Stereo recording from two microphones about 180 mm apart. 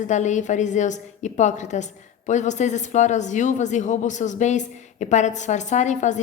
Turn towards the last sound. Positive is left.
turn(degrees=40)  # may be behind; listen again after turning